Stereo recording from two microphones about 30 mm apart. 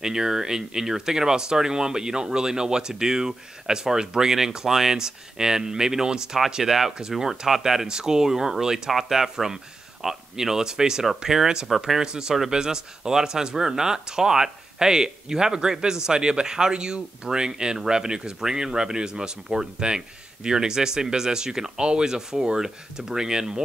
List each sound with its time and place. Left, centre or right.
0.0 s speech: centre
6.6 s speech: centre